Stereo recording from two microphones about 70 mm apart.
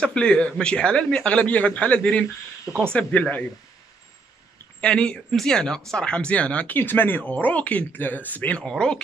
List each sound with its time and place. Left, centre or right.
0.0 s speech: centre
4.7 s speech: centre
6.8 s speech: left
8.6 s speech: centre